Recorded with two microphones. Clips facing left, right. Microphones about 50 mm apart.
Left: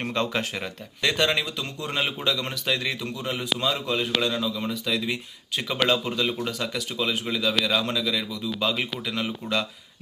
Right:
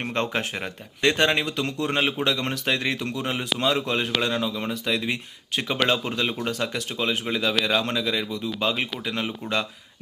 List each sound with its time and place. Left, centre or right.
0.1 s speech: right
1.5 s a man's voice: right